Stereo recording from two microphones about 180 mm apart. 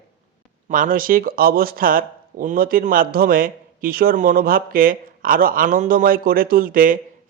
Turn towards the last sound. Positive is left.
turn(degrees=-50)  # may be behind; listen again after turning